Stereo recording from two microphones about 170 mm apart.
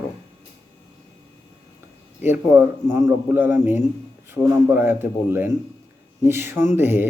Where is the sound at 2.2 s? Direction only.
10° right (ahead or behind).